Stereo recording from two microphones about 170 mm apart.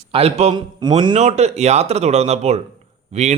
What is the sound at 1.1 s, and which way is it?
A man's voice, 40° right (ahead or behind).